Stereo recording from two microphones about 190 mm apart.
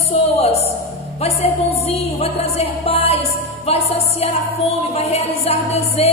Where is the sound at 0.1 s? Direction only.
35° left (ahead or behind).